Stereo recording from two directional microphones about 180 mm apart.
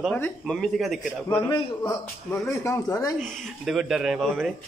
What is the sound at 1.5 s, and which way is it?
A man's voice, 25° left (ahead or behind).